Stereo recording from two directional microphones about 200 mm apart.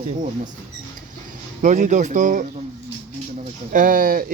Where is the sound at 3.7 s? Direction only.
40° right (ahead or behind).